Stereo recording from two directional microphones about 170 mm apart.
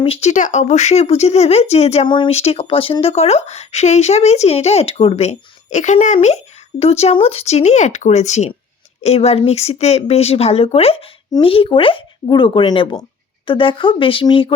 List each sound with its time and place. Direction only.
0.0 s speech: 35° left (ahead or behind)